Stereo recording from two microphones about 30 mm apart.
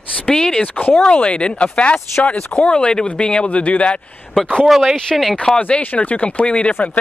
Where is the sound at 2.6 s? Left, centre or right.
Left.